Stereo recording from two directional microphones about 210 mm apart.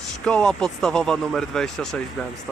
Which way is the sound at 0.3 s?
5° left (ahead or behind).